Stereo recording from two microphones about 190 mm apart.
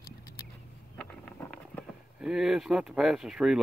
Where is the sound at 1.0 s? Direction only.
5° left (ahead or behind).